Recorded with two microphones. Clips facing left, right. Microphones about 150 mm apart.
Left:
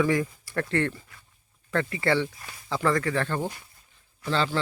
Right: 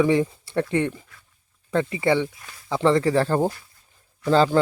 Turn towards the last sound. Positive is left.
turn(degrees=-45)  # may be behind; listen again after turning